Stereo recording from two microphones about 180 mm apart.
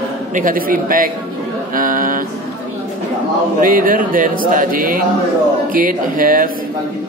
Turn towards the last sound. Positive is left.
turn(degrees=-50)  # may be behind; listen again after turning